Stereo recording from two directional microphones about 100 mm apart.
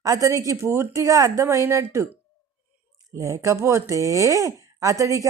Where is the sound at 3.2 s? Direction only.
30° right (ahead or behind).